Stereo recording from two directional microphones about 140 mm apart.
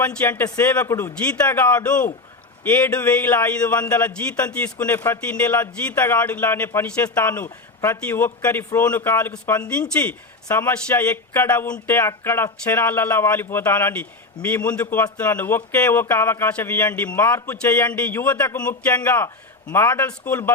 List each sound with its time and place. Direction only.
0.0 s speech: 10° left (ahead or behind)